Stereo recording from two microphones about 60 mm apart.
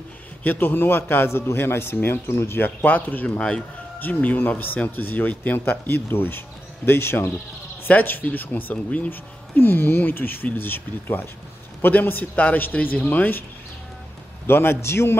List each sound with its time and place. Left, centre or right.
0.4 s speech: left
3.3 s speech: centre
4.0 s speech: left
14.4 s a man's voice: left